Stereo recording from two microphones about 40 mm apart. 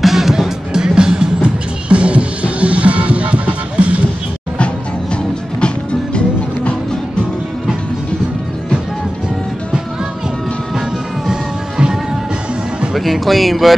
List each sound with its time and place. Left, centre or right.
0.0 s music: centre
0.7 s music: centre
1.9 s music: right
5.1 s music: left
12.9 s music: centre